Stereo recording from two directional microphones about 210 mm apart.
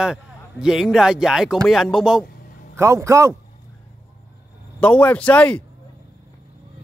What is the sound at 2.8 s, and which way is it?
Speech, 15° right (ahead or behind).